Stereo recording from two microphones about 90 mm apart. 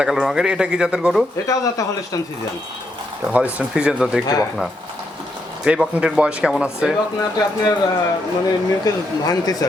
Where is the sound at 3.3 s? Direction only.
15° right (ahead or behind).